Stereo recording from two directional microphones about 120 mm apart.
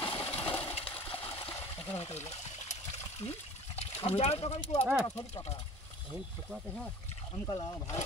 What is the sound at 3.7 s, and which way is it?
Speech, 55° left (ahead or behind).